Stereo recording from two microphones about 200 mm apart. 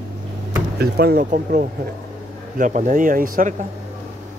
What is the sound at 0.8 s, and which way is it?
Speech, 50° right (ahead or behind).